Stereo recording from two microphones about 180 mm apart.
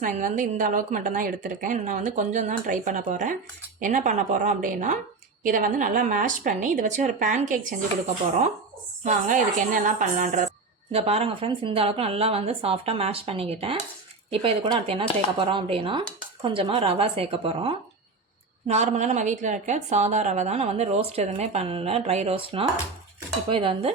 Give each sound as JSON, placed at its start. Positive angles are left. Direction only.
{"t": 0.0, "sound": "a woman's voice", "side_deg": -45}
{"t": 9.0, "sound": "a woman's voice", "side_deg": -45}
{"t": 10.9, "sound": "a woman's voice", "side_deg": -35}
{"t": 23.5, "sound": "dishes", "side_deg": -30}